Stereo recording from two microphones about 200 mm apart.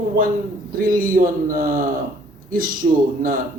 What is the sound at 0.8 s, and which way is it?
A man's voice, 45° right (ahead or behind).